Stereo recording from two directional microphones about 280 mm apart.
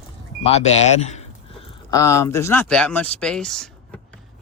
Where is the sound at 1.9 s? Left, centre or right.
Centre.